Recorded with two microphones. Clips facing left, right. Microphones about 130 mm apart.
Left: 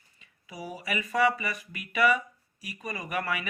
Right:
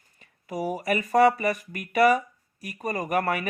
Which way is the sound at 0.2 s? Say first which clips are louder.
Right 10 dB; 50° right (ahead or behind).